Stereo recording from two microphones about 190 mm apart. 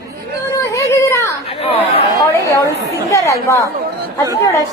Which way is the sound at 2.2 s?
15° left (ahead or behind).